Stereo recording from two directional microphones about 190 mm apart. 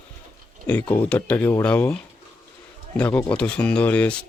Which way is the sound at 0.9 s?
10° left (ahead or behind).